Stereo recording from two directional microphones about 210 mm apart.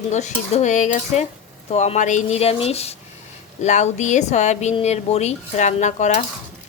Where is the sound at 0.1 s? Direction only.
35° left (ahead or behind).